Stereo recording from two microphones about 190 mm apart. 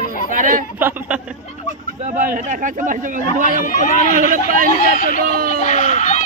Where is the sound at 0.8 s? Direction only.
10° right (ahead or behind).